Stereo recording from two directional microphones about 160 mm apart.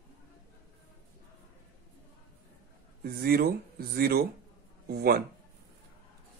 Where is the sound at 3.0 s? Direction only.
75° right (ahead or behind).